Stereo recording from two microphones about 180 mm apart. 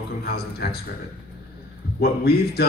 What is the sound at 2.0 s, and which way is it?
Speech, 60° left (ahead or behind).